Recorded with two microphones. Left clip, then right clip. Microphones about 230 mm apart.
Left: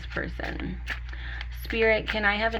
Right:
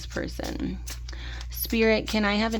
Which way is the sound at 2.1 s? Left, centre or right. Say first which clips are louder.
Left 1 dB; right.